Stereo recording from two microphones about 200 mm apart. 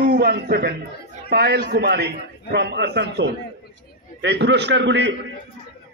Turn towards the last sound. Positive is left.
turn(degrees=-65)  # may be behind; listen again after turning